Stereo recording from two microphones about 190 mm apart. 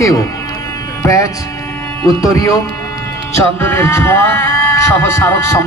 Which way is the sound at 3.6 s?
15° left (ahead or behind).